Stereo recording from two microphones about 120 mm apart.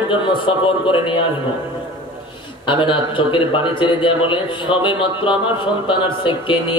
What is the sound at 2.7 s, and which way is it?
Speech, 45° left (ahead or behind).